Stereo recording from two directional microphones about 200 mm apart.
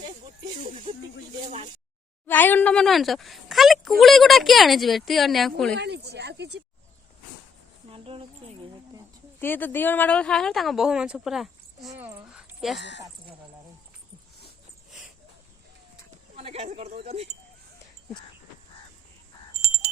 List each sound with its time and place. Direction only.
2.2 s speech: 10° left (ahead or behind)
5.7 s speech: 55° right (ahead or behind)
7.9 s a sound: 30° right (ahead or behind)
9.4 s speech: 10° left (ahead or behind)
11.9 s dog: 10° right (ahead or behind)
12.8 s speech: 60° left (ahead or behind)
16.3 s a sound: 30° right (ahead or behind)